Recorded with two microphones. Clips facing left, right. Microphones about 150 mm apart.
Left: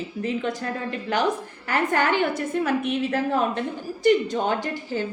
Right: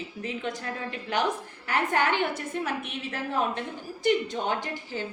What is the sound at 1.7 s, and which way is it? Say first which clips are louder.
A woman's voice: left 3 dB; 40° left (ahead or behind).